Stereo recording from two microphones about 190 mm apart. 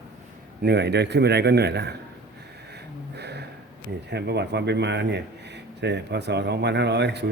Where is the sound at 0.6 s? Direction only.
60° right (ahead or behind).